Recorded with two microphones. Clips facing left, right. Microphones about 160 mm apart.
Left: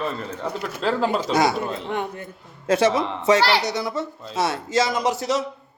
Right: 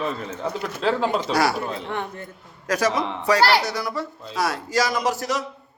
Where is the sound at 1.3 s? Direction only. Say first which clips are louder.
Left 1 dB; 20° left (ahead or behind).